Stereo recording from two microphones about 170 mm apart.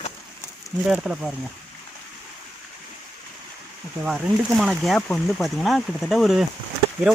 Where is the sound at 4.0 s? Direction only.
10° right (ahead or behind).